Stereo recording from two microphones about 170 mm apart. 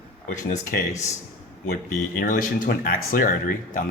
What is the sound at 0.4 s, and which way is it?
Speech, 55° left (ahead or behind).